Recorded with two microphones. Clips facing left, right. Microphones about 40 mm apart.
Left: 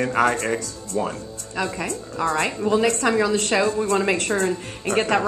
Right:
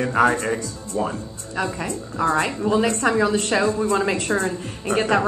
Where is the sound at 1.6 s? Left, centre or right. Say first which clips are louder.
Right 1 dB; left.